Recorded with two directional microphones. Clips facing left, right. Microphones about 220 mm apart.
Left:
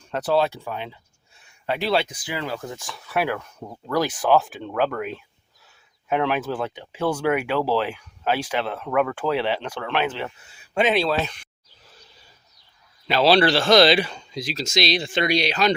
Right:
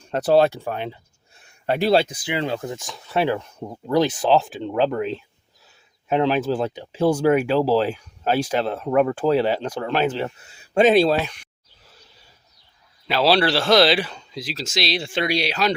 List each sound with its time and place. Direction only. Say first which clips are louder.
0.1 s speech: right 4 dB; 35° right (ahead or behind)
0.3 s speech: right 6 dB; 50° right (ahead or behind)
2.2 s speech: right 4 dB; 25° right (ahead or behind); by 11.2 s 40° right (ahead or behind)
13.1 s speech: left 1 dB; 5° right (ahead or behind)